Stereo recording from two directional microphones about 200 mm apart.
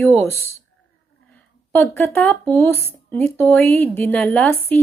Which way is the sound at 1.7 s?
10° left (ahead or behind).